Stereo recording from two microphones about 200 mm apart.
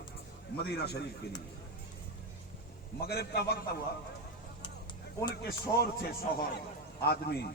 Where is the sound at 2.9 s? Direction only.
50° left (ahead or behind).